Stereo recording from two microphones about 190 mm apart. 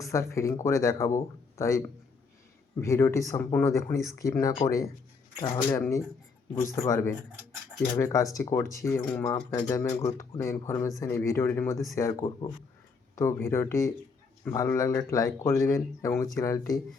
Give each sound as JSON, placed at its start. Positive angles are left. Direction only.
{"t": 0.1, "sound": "speech", "side_deg": 15}
{"t": 2.8, "sound": "speech", "side_deg": 15}